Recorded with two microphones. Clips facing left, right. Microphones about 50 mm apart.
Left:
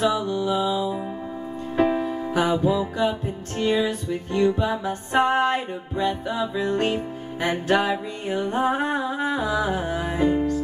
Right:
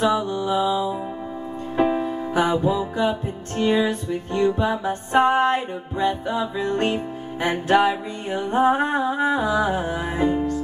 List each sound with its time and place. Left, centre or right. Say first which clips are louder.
0.0 s music: right 1 dB; centre